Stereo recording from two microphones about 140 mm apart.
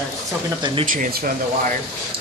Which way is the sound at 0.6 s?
40° right (ahead or behind).